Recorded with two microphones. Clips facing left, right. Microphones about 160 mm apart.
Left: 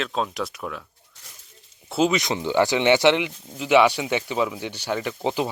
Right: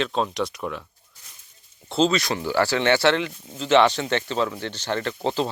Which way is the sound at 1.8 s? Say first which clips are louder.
Even; 10° left (ahead or behind).